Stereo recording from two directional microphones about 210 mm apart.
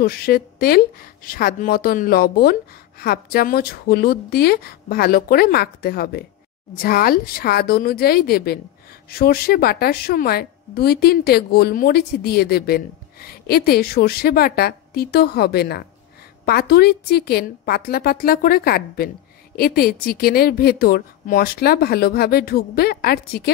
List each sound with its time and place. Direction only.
0.0 s a woman's voice: 45° left (ahead or behind)